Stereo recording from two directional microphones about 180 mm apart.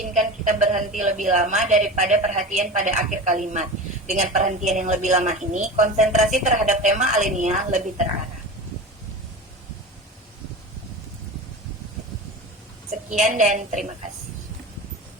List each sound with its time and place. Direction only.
0.0 s a woman's voice: 45° right (ahead or behind)
13.1 s a woman's voice: 45° right (ahead or behind)